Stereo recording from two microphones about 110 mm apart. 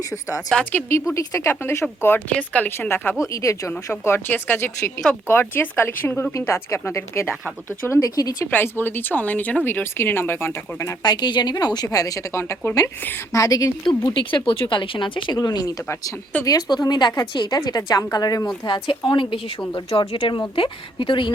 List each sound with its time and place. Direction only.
0.1 s speech: 30° left (ahead or behind)
0.5 s speech: 15° left (ahead or behind)
3.3 s speech: 30° left (ahead or behind)
8.0 s a woman's voice: 35° left (ahead or behind)
8.4 s speech: 20° left (ahead or behind)
11.0 s a woman's voice: 40° left (ahead or behind)
14.1 s speech: 50° left (ahead or behind)
15.4 s a woman's voice: 35° left (ahead or behind)